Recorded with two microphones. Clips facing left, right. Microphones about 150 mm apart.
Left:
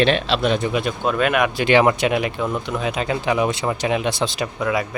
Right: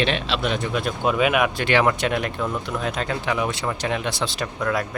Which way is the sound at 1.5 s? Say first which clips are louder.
Left 4 dB; 15° left (ahead or behind).